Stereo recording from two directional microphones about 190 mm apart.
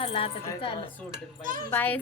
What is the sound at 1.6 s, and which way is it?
Speech, 10° left (ahead or behind).